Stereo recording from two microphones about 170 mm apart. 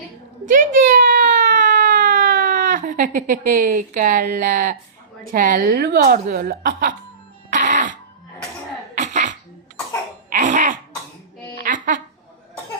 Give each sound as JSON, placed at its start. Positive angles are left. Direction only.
{"t": 0.4, "sound": "whimper", "side_deg": -50}
{"t": 5.3, "sound": "speech", "side_deg": -55}
{"t": 7.5, "sound": "music", "side_deg": -50}
{"t": 9.0, "sound": "throat clearing", "side_deg": -45}
{"t": 10.2, "sound": "cough", "side_deg": -50}
{"t": 11.5, "sound": "a sound", "side_deg": -50}